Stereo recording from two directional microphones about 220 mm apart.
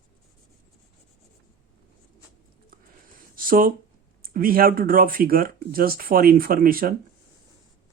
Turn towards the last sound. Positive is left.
turn(degrees=-40)  # may be behind; listen again after turning